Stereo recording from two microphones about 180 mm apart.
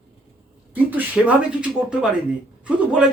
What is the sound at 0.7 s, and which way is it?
Speech, 10° right (ahead or behind).